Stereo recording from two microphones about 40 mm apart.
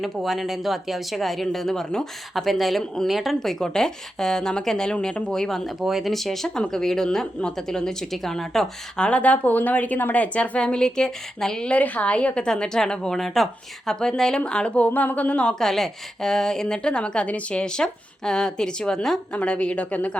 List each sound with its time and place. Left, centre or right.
0.0 s speech: centre
2.3 s speech: centre
3.4 s a woman's voice: centre
5.3 s a woman's voice: centre
5.8 s speech: centre
6.1 s a woman's voice: centre
9.0 s speech: left
10.6 s a woman's voice: centre
11.8 s a woman's voice: left
14.8 s speech: left
15.5 s a woman's voice: centre; by 20.1 s left